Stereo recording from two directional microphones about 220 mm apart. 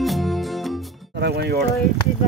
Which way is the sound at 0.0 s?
Centre (ahead or behind).